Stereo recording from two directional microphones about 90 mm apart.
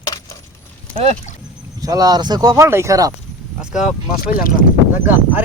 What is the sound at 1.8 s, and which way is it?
Speech, 40° right (ahead or behind).